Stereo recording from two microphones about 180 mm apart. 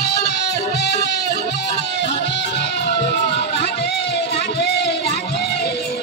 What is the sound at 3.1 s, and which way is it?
Music, 70° left (ahead or behind).